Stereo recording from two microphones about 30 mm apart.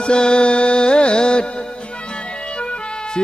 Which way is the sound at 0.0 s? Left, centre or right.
Left.